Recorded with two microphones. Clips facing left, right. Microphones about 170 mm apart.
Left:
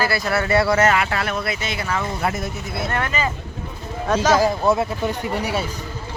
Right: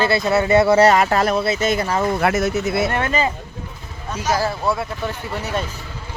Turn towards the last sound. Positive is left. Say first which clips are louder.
# left 2 dB
turn(degrees=10)  # may be behind; listen again after turning